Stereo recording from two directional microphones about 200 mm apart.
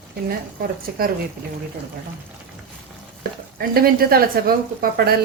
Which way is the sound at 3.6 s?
50° right (ahead or behind).